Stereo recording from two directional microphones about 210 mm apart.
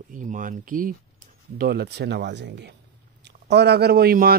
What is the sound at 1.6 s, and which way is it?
A man's voice, 50° right (ahead or behind).